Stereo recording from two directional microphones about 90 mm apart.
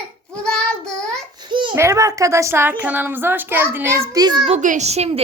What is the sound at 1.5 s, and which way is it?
Babbling, 60° right (ahead or behind).